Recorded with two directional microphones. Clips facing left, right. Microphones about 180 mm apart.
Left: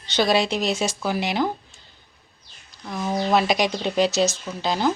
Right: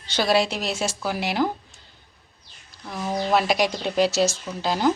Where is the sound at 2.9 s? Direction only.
10° right (ahead or behind).